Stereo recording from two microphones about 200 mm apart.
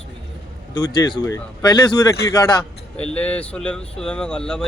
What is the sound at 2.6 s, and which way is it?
Speech, 5° left (ahead or behind).